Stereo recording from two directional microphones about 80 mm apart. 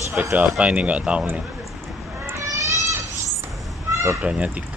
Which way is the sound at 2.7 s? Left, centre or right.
Right.